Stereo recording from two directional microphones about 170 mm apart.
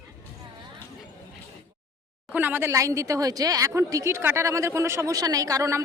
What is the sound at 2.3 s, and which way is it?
A woman's voice, 10° right (ahead or behind).